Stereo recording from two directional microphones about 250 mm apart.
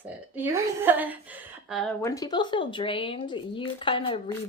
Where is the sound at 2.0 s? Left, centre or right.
Centre.